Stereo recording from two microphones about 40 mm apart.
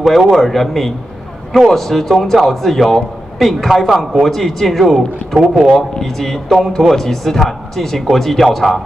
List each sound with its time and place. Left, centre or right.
0.0 s speech: centre
0.3 s a man's voice: centre